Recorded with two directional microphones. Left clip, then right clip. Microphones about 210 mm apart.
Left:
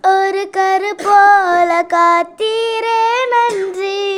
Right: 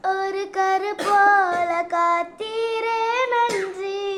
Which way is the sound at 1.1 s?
45° left (ahead or behind).